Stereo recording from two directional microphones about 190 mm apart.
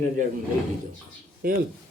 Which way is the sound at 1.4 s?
50° right (ahead or behind).